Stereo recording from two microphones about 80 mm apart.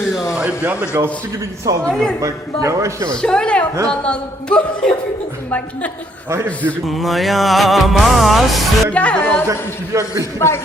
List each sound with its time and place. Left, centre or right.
0.3 s speech: centre
1.9 s music: centre
2.2 s a man's voice: right
3.2 s a man's voice: centre
6.3 s a man's voice: right
6.8 s music: centre
8.9 s a man's voice: centre
9.5 s a man's voice: right